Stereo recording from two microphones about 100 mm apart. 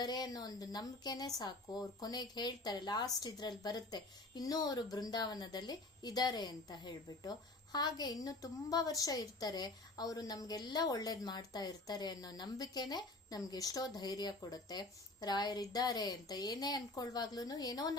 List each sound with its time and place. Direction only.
0.0 s speech: 40° left (ahead or behind)